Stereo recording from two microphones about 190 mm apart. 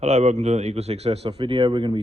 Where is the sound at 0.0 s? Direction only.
35° right (ahead or behind).